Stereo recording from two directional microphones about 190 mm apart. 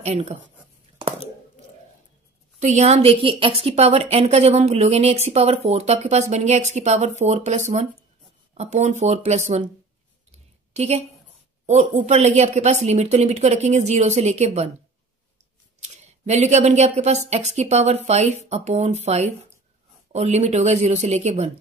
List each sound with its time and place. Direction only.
0.0 s a woman's voice: 35° right (ahead or behind)
2.6 s a woman's voice: 35° right (ahead or behind)
10.7 s a woman's voice: 35° right (ahead or behind)
15.8 s a woman's voice: 35° right (ahead or behind)